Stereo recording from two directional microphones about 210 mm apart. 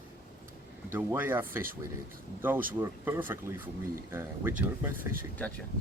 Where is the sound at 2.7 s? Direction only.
10° right (ahead or behind).